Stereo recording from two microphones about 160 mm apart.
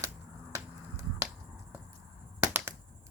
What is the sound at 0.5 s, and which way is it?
Finger snapping, 15° right (ahead or behind).